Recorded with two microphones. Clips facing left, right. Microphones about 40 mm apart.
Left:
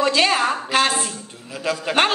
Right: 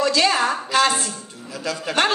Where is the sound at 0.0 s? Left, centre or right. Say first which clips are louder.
Left 1 dB; left.